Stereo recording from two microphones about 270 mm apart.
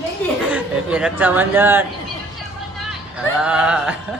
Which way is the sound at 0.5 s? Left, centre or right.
Centre.